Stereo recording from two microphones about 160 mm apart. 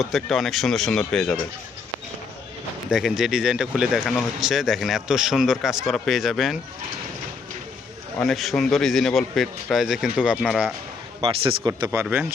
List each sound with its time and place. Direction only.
0.0 s speech: centre (ahead or behind)
2.9 s speech: centre (ahead or behind)
8.2 s speech: centre (ahead or behind)
11.2 s speech: 35° right (ahead or behind)
11.9 s speech: 20° right (ahead or behind)